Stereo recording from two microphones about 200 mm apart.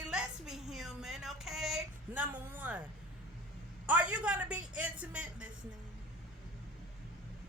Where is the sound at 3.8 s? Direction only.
5° right (ahead or behind).